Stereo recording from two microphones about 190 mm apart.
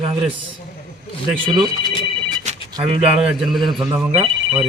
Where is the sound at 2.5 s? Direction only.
35° right (ahead or behind).